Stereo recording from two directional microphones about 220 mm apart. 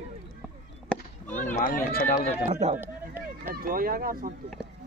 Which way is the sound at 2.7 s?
10° right (ahead or behind).